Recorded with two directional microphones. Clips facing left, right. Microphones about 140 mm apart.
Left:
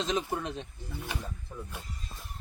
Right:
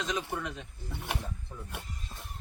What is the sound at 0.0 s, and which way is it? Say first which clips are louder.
Speech: left 3 dB; 30° left (ahead or behind).